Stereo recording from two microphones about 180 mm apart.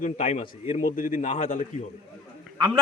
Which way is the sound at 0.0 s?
40° left (ahead or behind).